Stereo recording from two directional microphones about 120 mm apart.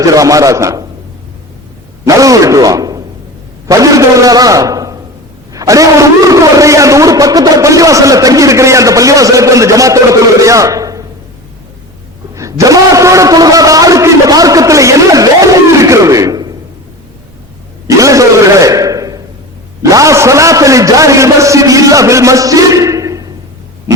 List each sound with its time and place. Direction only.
0.0 s a man's voice: 30° right (ahead or behind)
2.0 s a man's voice: 30° right (ahead or behind)
12.3 s a man's voice: 25° right (ahead or behind)
17.8 s a sound: 25° right (ahead or behind)
19.8 s a man's voice: 25° right (ahead or behind)